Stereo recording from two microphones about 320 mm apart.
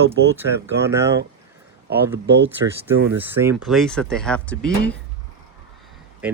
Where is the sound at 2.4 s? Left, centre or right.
Centre.